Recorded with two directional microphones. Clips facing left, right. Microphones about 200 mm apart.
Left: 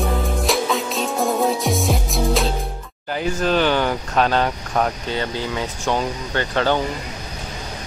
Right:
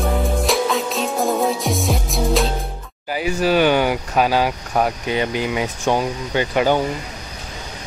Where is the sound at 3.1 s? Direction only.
10° right (ahead or behind).